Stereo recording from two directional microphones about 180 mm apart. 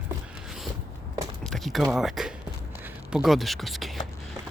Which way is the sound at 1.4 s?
Centre (ahead or behind).